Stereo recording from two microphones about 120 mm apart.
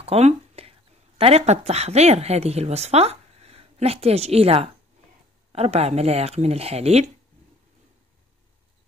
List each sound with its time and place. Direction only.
0.0 s speech: 60° right (ahead or behind)